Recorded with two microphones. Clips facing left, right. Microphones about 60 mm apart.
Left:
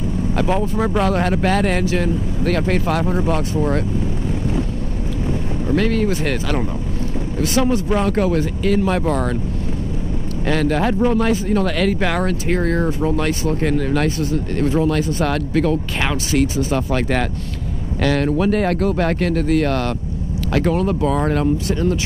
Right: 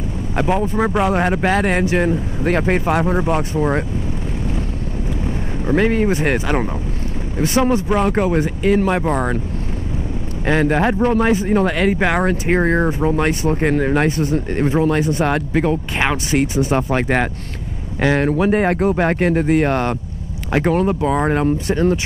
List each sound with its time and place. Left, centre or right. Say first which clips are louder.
0.4 s speech: right 3 dB; centre
5.7 s speech: right 3 dB; right
10.4 s speech: right 2 dB; right